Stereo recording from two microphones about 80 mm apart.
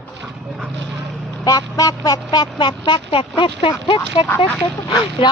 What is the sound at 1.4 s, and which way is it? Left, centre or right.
Speech, left.